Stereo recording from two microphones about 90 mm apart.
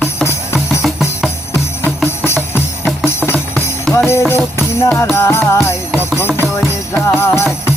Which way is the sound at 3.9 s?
30° left (ahead or behind).